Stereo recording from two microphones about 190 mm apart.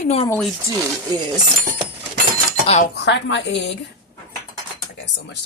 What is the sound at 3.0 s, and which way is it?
Speech, 70° left (ahead or behind).